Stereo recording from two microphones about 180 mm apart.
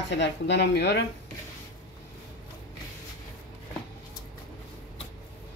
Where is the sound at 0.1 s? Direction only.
75° left (ahead or behind).